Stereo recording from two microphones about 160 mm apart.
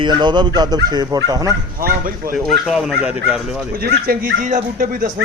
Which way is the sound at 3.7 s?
75° right (ahead or behind).